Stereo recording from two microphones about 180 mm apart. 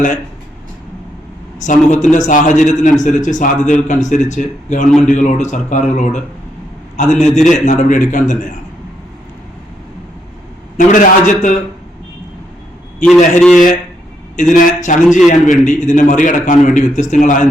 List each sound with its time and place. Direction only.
1.5 s a man's voice: 45° left (ahead or behind)
10.8 s a man's voice: 45° left (ahead or behind)
13.0 s a man's voice: 5° left (ahead or behind)
14.3 s a man's voice: 45° left (ahead or behind)